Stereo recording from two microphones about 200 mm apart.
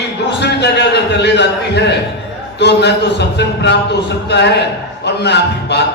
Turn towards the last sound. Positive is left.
turn(degrees=55)  # may be behind; listen again after turning